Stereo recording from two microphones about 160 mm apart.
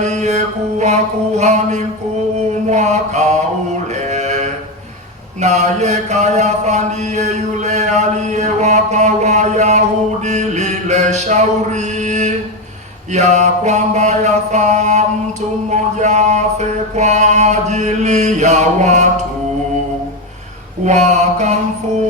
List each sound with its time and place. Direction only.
0.0 s mantra: 45° right (ahead or behind)
4.1 s a sound: 45° right (ahead or behind)
10.2 s mantra: 50° right (ahead or behind)
20.8 s mantra: 45° right (ahead or behind)